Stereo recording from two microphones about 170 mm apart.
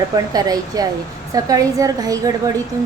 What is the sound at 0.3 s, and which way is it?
A woman's voice, 20° right (ahead or behind).